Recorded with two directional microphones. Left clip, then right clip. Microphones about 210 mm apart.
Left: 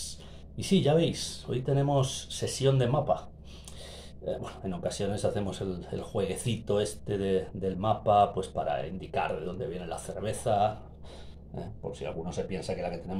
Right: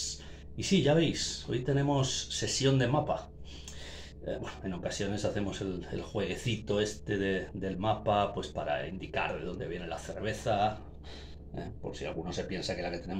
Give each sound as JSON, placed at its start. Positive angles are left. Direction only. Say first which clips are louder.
{"t": 0.6, "sound": "speech", "louder": "left 2 dB", "side_deg": 20}
{"t": 4.4, "sound": "speech", "louder": "left 2 dB", "side_deg": 20}